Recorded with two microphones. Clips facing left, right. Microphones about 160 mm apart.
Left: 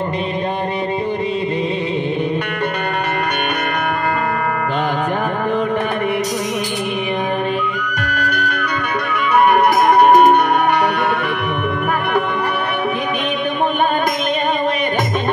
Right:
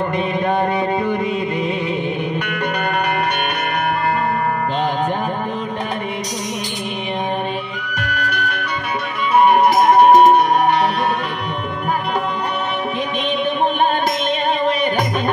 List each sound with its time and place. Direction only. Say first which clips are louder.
8.0 s music: left 1 dB; 45° left (ahead or behind)